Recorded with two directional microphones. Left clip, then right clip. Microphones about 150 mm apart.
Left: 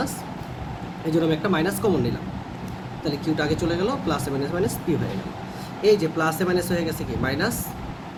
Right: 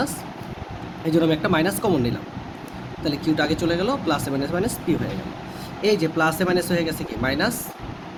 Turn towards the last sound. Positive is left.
turn(degrees=-90)